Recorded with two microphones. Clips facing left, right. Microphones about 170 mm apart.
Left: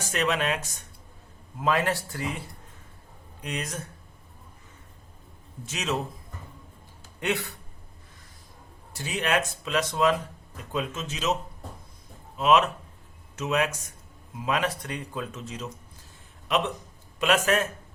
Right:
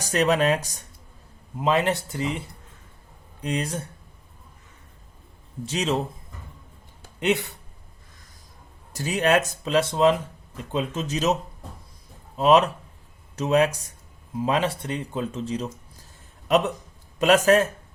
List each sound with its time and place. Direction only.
0.0 s speech: 40° right (ahead or behind)
1.6 s speech: 20° right (ahead or behind)
3.4 s speech: 30° right (ahead or behind)
5.6 s speech: 30° right (ahead or behind)
7.2 s speech: 20° right (ahead or behind)
8.9 s speech: 40° right (ahead or behind)
12.4 s speech: 35° right (ahead or behind)
17.2 s speech: 40° right (ahead or behind)